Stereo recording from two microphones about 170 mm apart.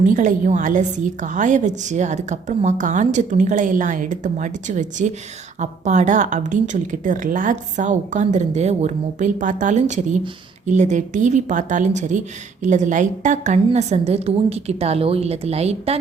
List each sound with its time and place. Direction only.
0.0 s a woman's voice: 50° right (ahead or behind)